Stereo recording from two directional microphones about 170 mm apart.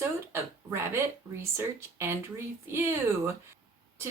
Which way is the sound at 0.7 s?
15° right (ahead or behind).